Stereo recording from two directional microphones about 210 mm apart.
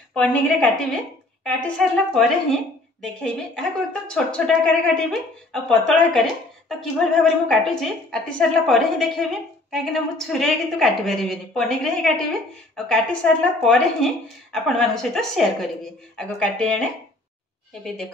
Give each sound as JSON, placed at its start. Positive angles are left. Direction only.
{"t": 0.1, "sound": "a woman's voice", "side_deg": 5}